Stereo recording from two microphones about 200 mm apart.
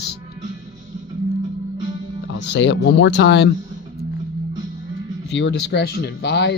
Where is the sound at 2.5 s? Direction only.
60° left (ahead or behind).